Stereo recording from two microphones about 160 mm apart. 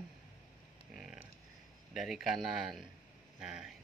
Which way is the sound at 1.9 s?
Centre (ahead or behind).